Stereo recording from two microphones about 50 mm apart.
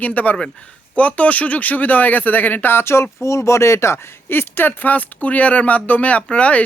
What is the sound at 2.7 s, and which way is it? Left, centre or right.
Speech, left.